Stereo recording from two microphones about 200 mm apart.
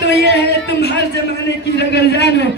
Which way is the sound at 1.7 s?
60° left (ahead or behind).